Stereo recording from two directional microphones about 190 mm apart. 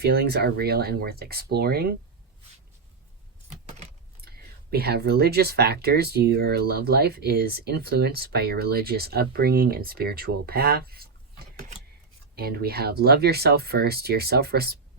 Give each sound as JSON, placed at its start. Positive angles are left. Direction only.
{"t": 0.0, "sound": "speech", "side_deg": -55}
{"t": 3.7, "sound": "keys jangling", "side_deg": -35}
{"t": 4.2, "sound": "speech", "side_deg": -55}
{"t": 12.4, "sound": "speech", "side_deg": -55}